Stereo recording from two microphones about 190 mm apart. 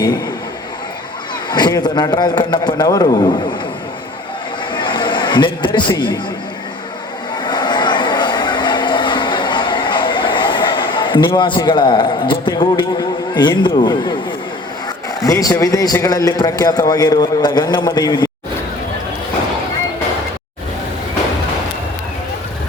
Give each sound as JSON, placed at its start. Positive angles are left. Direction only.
{"t": 1.5, "sound": "a man's voice", "side_deg": 20}
{"t": 4.7, "sound": "a sound", "side_deg": 25}
{"t": 5.9, "sound": "a man's voice", "side_deg": 25}
{"t": 7.4, "sound": "vehicle", "side_deg": 25}
{"t": 15.2, "sound": "a man's voice", "side_deg": 20}